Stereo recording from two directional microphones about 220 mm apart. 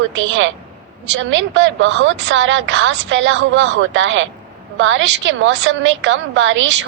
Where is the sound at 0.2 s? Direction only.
60° right (ahead or behind).